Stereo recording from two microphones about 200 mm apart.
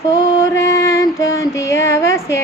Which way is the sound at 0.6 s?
15° left (ahead or behind).